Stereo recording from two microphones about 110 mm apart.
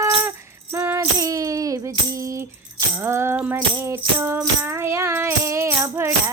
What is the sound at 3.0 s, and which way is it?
Music, 20° right (ahead or behind).